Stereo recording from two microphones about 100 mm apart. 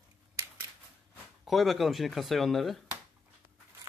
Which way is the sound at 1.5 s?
Centre (ahead or behind).